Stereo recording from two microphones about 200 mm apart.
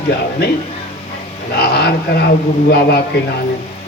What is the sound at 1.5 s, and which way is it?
Speech, 55° left (ahead or behind).